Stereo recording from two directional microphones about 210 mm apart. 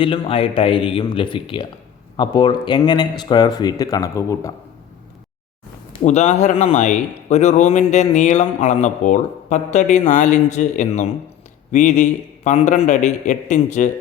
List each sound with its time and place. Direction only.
0.0 s speech: 25° left (ahead or behind)
6.1 s a man's voice: 30° left (ahead or behind)